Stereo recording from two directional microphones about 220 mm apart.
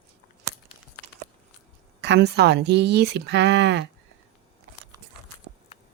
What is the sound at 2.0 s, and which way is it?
Speech, 50° right (ahead or behind).